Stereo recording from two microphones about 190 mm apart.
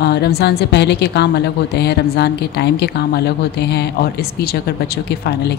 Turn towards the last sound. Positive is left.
turn(degrees=60)  # may be behind; listen again after turning